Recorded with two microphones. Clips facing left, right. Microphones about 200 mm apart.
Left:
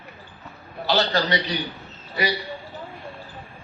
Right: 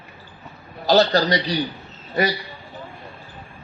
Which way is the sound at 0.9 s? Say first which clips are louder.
Right 5 dB; 40° right (ahead or behind).